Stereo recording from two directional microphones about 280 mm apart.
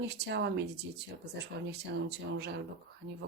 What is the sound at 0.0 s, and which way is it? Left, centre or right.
Speech, right.